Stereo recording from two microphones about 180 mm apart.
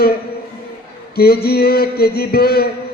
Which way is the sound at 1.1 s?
60° left (ahead or behind).